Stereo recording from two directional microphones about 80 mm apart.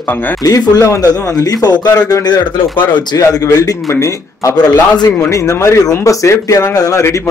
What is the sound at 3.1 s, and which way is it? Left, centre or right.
A man's voice, left.